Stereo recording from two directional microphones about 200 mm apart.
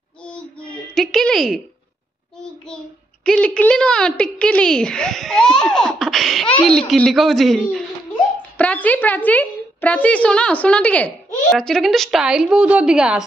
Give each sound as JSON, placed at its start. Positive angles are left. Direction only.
{"t": 0.2, "sound": "child singing", "side_deg": 5}
{"t": 0.9, "sound": "a woman's voice", "side_deg": 0}
{"t": 3.3, "sound": "a woman's voice", "side_deg": 5}